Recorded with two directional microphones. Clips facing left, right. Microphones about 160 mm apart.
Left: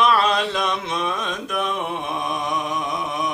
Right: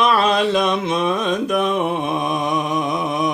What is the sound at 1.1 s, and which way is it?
Music, 25° right (ahead or behind).